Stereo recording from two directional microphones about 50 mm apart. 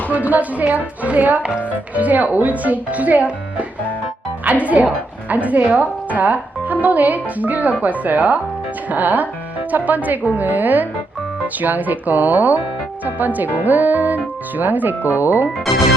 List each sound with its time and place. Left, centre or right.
0.1 s a woman's voice: right